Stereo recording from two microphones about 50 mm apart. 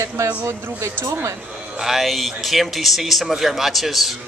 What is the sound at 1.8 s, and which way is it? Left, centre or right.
Speech, centre.